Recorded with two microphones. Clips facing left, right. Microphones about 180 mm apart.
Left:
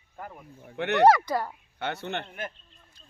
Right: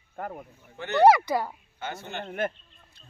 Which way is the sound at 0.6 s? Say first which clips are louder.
Left 4 dB; 60° left (ahead or behind).